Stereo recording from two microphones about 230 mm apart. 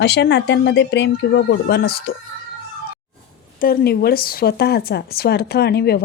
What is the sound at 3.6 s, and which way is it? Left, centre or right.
Speech, left.